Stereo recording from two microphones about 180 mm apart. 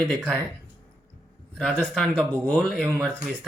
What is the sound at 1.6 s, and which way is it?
Speech, 5° left (ahead or behind).